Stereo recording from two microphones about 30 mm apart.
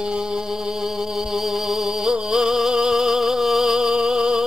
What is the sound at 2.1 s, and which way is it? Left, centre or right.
Music, right.